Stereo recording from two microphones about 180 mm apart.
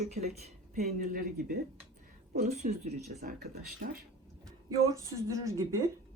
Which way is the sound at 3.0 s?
60° right (ahead or behind).